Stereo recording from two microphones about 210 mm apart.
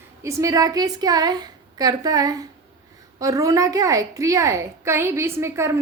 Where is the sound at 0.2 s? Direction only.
15° right (ahead or behind).